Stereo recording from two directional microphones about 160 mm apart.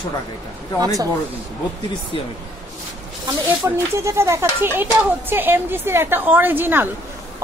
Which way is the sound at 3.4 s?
15° right (ahead or behind).